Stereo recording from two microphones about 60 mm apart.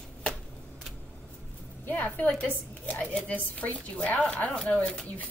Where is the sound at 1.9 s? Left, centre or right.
Left.